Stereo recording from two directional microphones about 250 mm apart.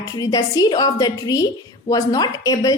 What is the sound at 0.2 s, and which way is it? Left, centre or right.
A woman's voice, centre.